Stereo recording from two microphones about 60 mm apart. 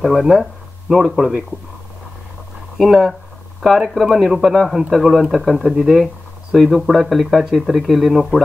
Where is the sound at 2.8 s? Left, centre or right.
Centre.